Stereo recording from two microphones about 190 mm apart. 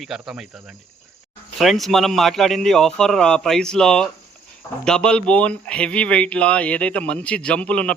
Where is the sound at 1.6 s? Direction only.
Centre (ahead or behind).